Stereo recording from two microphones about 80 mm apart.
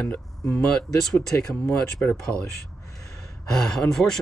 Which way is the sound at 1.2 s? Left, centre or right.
Left.